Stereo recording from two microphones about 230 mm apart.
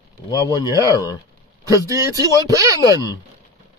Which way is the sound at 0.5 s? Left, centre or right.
Centre.